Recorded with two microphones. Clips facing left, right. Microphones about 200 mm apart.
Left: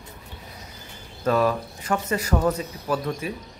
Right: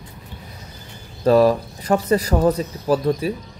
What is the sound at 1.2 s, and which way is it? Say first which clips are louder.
Speech: right 7 dB; 35° right (ahead or behind).